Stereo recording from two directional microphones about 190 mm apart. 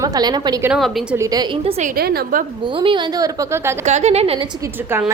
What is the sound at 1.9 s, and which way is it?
Speech, 55° right (ahead or behind).